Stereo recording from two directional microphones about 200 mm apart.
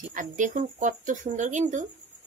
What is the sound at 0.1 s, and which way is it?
Speech, 40° right (ahead or behind).